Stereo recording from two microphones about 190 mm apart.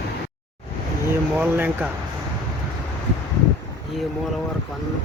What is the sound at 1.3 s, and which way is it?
Speech, 10° right (ahead or behind).